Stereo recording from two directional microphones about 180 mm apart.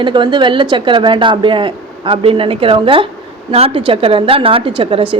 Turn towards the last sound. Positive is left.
turn(degrees=-30)  # may be behind; listen again after turning